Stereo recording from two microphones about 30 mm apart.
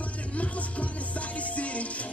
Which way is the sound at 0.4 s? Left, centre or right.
Left.